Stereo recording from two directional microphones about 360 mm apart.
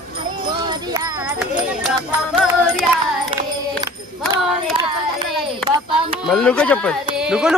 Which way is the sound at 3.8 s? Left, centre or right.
Centre.